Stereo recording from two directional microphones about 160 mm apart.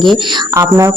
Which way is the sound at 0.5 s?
20° right (ahead or behind).